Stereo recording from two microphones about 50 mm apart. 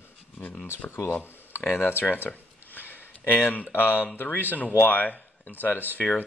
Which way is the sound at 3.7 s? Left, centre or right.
Left.